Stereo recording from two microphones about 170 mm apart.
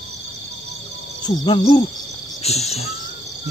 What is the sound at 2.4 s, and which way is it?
Cricket, 40° left (ahead or behind).